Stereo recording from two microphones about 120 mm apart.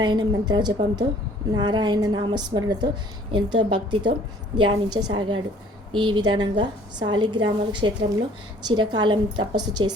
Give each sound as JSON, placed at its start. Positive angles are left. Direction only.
{"t": 0.0, "sound": "a woman's voice", "side_deg": -35}